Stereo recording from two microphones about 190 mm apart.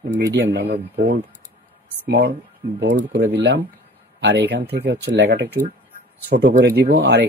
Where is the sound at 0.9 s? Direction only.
55° right (ahead or behind).